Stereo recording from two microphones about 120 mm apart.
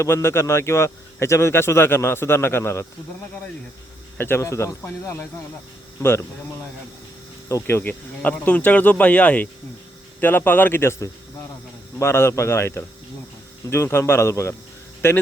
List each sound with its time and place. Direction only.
0.0 s speech: 20° left (ahead or behind)
4.2 s speech: 20° left (ahead or behind)
7.4 s speech: 20° left (ahead or behind)